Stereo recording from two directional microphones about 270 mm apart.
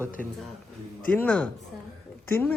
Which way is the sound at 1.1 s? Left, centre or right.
Centre.